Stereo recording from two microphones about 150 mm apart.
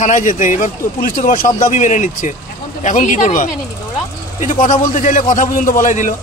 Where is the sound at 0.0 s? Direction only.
60° left (ahead or behind).